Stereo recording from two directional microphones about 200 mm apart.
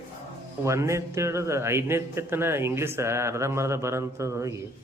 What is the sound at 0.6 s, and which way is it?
A man's voice, 15° right (ahead or behind).